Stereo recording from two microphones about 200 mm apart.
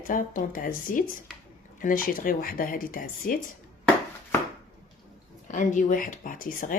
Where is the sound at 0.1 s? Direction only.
40° left (ahead or behind).